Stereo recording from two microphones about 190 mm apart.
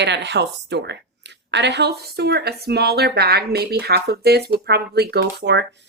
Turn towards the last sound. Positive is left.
turn(degrees=-60)  # may be behind; listen again after turning